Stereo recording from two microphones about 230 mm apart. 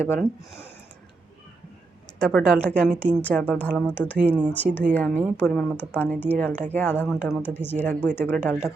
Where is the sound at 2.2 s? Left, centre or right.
Centre.